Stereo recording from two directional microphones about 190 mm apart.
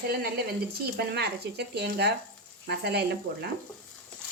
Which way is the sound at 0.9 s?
60° right (ahead or behind).